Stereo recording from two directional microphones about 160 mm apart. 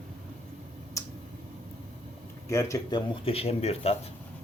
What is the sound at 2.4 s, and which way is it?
Speech, 20° left (ahead or behind).